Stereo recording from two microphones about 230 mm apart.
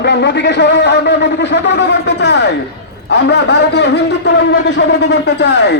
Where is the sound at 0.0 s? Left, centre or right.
Left.